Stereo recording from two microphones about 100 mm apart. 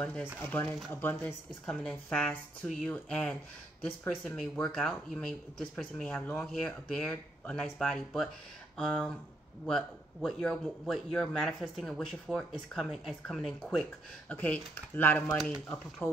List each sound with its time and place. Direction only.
0.0 s a man's voice: 20° left (ahead or behind); by 13.8 s centre (ahead or behind)
14.3 s speech: 15° left (ahead or behind)
15.2 s speech: 5° left (ahead or behind)